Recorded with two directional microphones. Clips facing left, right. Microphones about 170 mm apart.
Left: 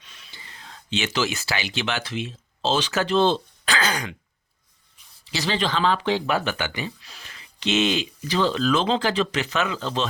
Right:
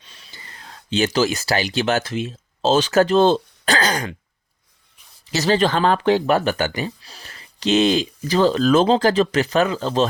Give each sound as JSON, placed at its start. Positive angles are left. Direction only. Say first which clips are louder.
{"t": 0.0, "sound": "speech", "louder": "right 2 dB", "side_deg": -35}
{"t": 5.2, "sound": "speech", "louder": "right 7 dB", "side_deg": -45}